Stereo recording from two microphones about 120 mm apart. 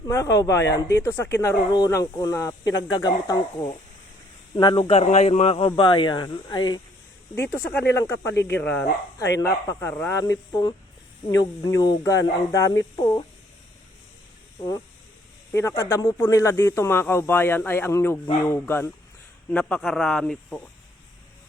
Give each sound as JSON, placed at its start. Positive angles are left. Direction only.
{"t": 0.1, "sound": "speech", "side_deg": 25}
{"t": 1.7, "sound": "speech", "side_deg": 30}
{"t": 5.0, "sound": "speech", "side_deg": 70}
{"t": 7.3, "sound": "speech", "side_deg": 15}
{"t": 15.5, "sound": "speech", "side_deg": 25}
{"t": 19.5, "sound": "a man's voice", "side_deg": 10}